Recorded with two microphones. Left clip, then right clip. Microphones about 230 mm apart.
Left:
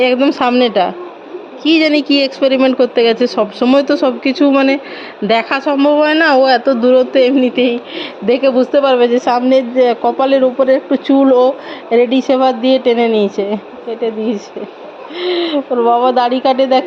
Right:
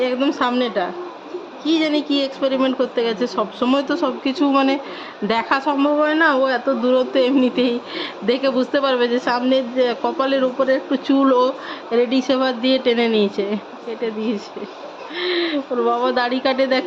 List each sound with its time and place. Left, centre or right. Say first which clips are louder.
0.0 s a woman's voice: left 7 dB; left
15.2 s a woman's voice: left 5 dB; centre